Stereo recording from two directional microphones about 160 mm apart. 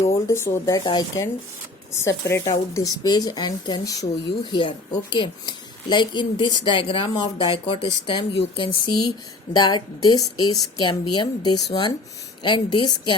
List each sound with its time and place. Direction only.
0.0 s speech: 20° left (ahead or behind)